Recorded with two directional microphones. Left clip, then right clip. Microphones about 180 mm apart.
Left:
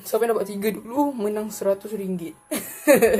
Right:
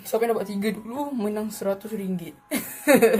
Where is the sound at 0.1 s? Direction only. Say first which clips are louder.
Left 2 dB; 15° left (ahead or behind).